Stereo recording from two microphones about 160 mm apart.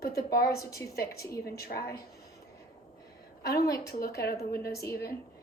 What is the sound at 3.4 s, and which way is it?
A woman's voice, 75° left (ahead or behind).